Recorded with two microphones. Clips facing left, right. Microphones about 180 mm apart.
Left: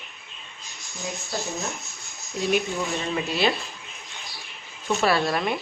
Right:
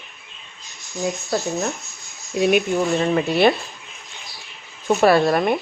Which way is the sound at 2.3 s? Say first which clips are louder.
Right 7 dB; 70° right (ahead or behind).